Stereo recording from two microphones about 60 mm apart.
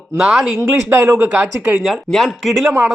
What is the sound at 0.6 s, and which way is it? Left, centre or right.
Speech, right.